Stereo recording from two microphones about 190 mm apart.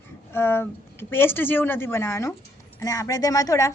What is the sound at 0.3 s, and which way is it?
A woman's voice, 10° left (ahead or behind).